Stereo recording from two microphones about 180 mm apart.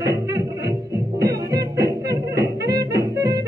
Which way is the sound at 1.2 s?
20° right (ahead or behind).